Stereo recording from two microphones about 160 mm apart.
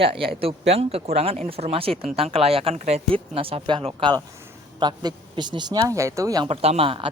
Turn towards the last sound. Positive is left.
turn(degrees=-35)  # may be behind; listen again after turning